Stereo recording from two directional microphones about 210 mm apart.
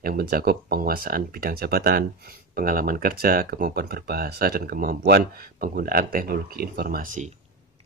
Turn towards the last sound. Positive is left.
turn(degrees=-40)  # may be behind; listen again after turning